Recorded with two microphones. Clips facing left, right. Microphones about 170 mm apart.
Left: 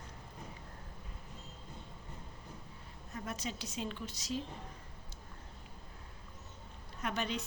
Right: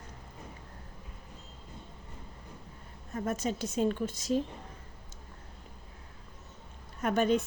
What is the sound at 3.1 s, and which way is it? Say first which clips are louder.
Speech: right 9 dB; 50° right (ahead or behind).